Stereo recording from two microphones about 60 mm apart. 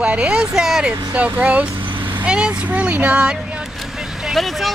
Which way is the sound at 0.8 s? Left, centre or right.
Right.